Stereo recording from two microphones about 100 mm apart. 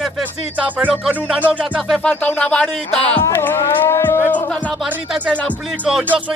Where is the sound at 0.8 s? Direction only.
10° right (ahead or behind).